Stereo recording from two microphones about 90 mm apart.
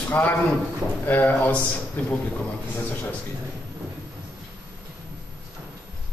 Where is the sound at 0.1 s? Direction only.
20° left (ahead or behind).